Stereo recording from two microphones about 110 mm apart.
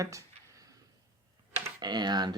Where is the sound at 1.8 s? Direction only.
40° right (ahead or behind).